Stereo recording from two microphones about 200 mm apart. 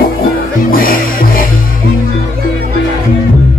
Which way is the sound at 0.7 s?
45° left (ahead or behind).